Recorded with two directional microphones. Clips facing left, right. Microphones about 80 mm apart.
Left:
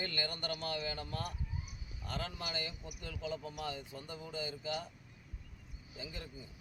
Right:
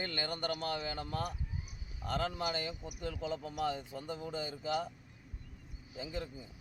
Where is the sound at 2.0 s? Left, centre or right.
Right.